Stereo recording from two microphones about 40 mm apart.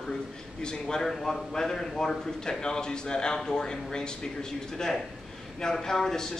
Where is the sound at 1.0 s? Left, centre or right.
Centre.